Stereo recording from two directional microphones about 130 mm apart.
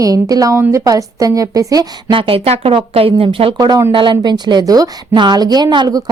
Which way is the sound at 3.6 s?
30° right (ahead or behind).